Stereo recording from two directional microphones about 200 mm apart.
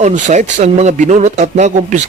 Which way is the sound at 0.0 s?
35° right (ahead or behind).